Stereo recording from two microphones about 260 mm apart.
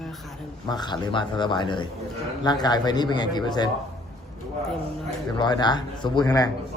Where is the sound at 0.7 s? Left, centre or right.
Centre.